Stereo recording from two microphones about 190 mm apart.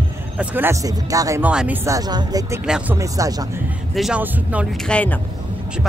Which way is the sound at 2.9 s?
15° right (ahead or behind).